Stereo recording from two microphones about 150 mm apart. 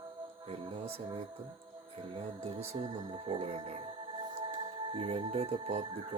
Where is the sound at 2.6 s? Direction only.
40° right (ahead or behind).